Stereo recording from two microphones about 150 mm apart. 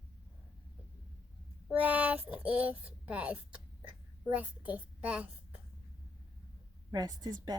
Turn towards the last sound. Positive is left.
turn(degrees=-25)  # may be behind; listen again after turning